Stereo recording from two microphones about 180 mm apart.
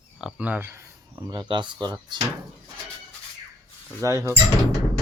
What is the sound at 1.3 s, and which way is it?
Speech, 25° right (ahead or behind).